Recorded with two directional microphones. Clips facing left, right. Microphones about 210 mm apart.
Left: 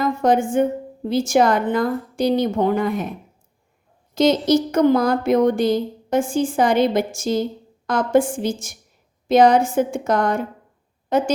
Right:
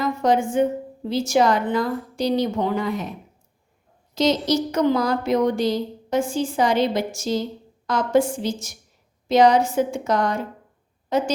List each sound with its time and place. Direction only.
0.0 s a sound: 50° left (ahead or behind)
1.0 s a woman's voice: 50° left (ahead or behind)
4.1 s a woman's voice: 55° left (ahead or behind)